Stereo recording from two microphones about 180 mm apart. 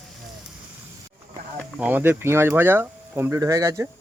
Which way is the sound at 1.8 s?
10° right (ahead or behind).